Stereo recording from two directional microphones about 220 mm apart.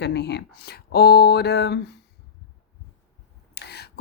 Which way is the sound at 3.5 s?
50° left (ahead or behind).